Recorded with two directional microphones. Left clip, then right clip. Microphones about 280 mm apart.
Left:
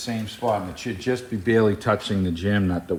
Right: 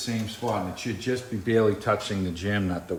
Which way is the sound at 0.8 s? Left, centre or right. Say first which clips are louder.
Left 3 dB; centre.